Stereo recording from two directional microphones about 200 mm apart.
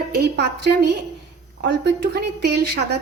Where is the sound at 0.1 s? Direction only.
55° right (ahead or behind).